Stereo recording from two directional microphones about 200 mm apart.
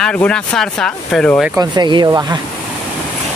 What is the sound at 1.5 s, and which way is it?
Speech, 20° right (ahead or behind).